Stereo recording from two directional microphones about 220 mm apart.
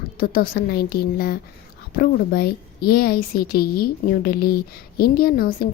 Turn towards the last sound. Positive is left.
turn(degrees=40)  # may be behind; listen again after turning